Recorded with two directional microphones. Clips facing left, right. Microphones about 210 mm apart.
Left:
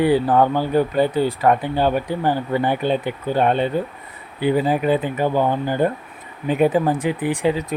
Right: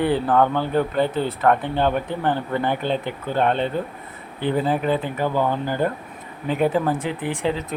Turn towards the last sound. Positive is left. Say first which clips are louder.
# left 4 dB
turn(degrees=15)  # may be behind; listen again after turning